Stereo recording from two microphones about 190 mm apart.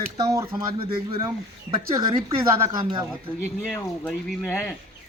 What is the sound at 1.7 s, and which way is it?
Speech, 30° right (ahead or behind).